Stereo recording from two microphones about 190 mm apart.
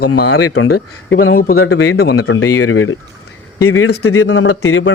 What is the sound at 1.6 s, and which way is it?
A man's voice, 75° left (ahead or behind).